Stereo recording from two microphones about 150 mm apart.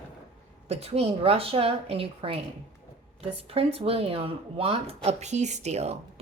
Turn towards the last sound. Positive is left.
turn(degrees=-45)  # may be behind; listen again after turning